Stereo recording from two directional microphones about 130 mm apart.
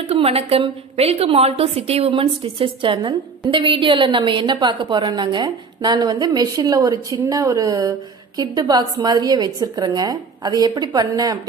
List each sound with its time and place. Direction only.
0.1 s a woman's voice: 50° right (ahead or behind); by 11.3 s 30° right (ahead or behind)